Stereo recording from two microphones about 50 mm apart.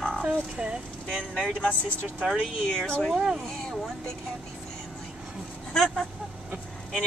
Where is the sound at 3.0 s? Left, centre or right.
Centre.